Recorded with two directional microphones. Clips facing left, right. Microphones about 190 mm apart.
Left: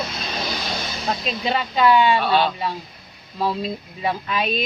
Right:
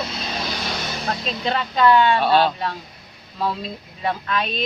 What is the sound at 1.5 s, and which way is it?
Speech, 10° left (ahead or behind).